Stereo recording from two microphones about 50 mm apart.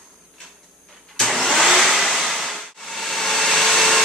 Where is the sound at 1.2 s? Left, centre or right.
Centre.